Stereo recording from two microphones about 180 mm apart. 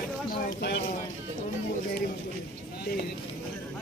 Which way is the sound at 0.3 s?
70° left (ahead or behind).